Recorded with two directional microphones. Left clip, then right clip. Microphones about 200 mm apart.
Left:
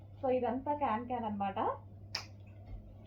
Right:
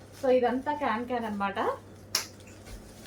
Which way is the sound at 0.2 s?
25° right (ahead or behind).